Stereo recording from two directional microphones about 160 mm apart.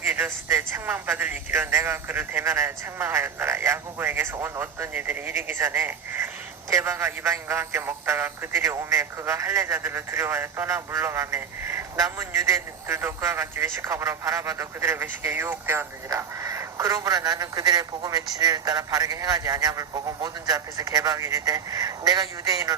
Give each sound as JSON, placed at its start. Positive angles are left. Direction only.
{"t": 0.1, "sound": "a man's voice", "side_deg": -10}